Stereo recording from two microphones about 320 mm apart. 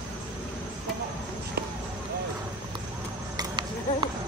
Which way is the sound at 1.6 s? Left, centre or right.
Right.